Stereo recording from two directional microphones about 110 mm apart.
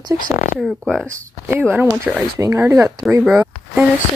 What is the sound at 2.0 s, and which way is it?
Speech, 15° right (ahead or behind).